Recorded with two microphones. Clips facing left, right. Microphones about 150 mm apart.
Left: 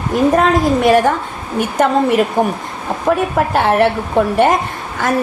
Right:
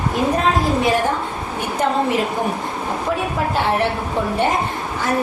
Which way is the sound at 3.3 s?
65° left (ahead or behind).